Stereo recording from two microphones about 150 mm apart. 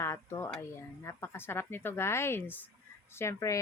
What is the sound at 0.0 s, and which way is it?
A woman's voice, 20° left (ahead or behind).